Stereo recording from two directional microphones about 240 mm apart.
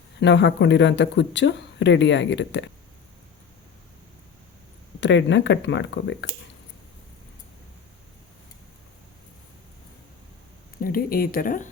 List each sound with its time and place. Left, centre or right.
0.2 s speech: left
4.9 s speech: left
10.8 s speech: left